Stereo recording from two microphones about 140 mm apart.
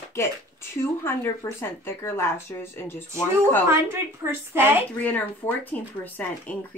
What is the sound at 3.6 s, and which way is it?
A woman's voice, 20° right (ahead or behind).